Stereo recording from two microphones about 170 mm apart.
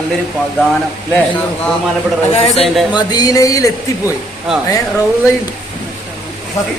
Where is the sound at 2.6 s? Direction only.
Centre (ahead or behind).